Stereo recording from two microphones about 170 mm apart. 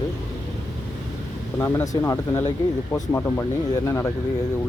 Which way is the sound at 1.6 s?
15° left (ahead or behind).